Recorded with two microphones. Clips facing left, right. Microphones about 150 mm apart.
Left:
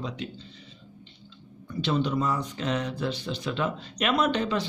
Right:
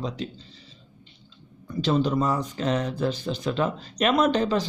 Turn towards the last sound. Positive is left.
turn(degrees=-40)  # may be behind; listen again after turning